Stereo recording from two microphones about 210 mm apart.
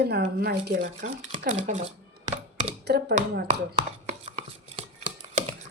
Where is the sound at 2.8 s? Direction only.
50° right (ahead or behind).